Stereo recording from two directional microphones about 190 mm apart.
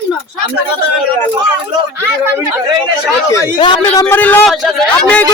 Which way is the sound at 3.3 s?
15° left (ahead or behind).